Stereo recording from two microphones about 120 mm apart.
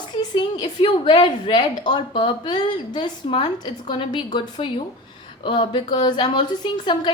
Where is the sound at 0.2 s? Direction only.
35° left (ahead or behind).